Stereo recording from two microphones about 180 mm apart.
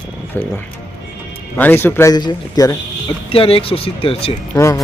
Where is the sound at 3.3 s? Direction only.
30° left (ahead or behind).